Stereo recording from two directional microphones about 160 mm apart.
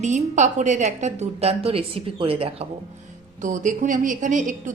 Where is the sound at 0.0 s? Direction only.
50° right (ahead or behind).